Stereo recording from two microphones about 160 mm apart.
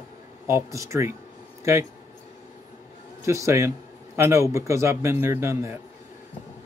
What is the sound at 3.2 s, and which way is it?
Speech, 20° right (ahead or behind).